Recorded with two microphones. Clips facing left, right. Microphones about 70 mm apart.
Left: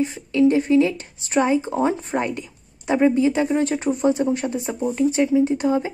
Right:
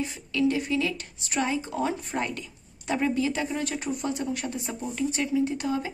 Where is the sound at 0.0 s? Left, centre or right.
Left.